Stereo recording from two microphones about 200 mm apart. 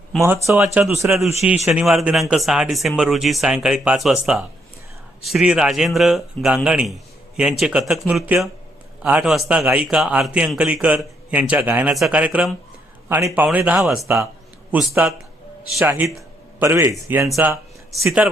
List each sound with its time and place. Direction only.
0.3 s a man's voice: 10° right (ahead or behind)
14.0 s a man's voice: 15° right (ahead or behind)